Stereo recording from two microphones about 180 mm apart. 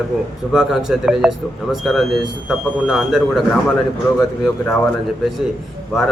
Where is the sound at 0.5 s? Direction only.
Centre (ahead or behind).